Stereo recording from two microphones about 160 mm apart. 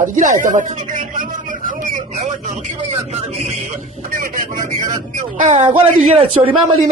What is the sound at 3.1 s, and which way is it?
Speech, 40° right (ahead or behind).